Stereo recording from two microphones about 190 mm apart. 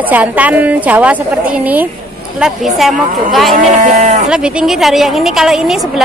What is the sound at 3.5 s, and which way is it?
Speech, 40° right (ahead or behind).